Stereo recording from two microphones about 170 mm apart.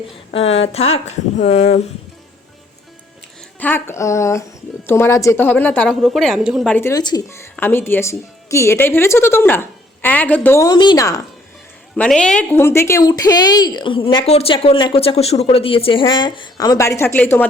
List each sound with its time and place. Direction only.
0.3 s speech: 35° left (ahead or behind)
3.6 s speech: 10° left (ahead or behind); by 6.7 s 5° right (ahead or behind)
6.7 s speech: 15° left (ahead or behind)
11.9 s speech: 5° left (ahead or behind)